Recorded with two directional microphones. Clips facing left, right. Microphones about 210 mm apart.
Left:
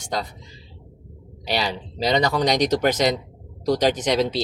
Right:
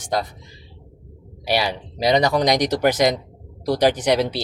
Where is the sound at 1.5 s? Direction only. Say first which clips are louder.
Right 3 dB; 10° right (ahead or behind).